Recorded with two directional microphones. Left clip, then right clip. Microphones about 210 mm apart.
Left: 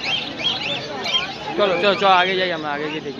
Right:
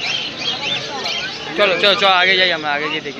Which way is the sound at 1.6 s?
10° left (ahead or behind).